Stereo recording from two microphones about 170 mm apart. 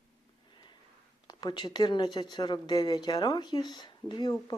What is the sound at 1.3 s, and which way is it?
Speech, 25° left (ahead or behind).